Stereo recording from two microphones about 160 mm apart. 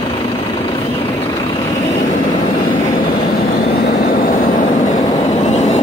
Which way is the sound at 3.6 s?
75° left (ahead or behind).